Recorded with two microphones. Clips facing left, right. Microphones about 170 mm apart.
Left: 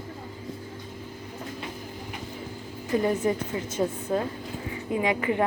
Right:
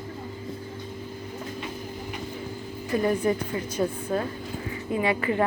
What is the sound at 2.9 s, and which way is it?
A woman's voice, 20° left (ahead or behind).